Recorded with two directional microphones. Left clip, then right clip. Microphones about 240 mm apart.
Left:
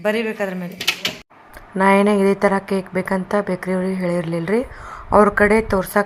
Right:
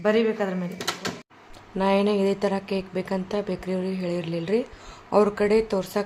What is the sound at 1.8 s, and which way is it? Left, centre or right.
A woman's voice, centre.